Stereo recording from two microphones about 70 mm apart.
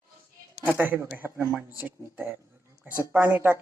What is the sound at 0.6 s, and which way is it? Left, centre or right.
A woman's voice, right.